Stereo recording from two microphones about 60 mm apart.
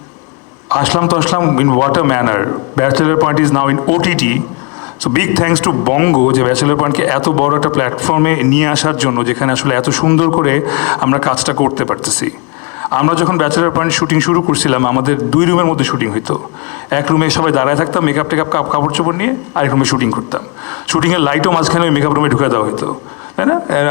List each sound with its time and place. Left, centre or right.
0.7 s a man's voice: centre
1.5 s speech: left
6.7 s speech: left
13.9 s a man's voice: centre; by 19.8 s left
19.8 s a man's voice: centre
20.1 s speech: left
20.8 s speech: centre